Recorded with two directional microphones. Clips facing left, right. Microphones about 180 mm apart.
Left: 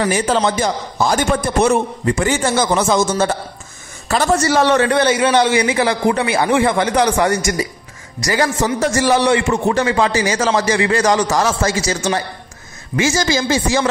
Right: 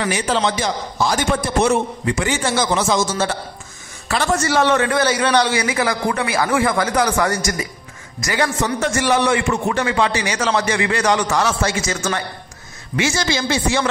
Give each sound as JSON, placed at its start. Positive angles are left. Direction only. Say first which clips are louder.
{"t": 0.0, "sound": "a man's voice", "louder": "left 3 dB", "side_deg": 45}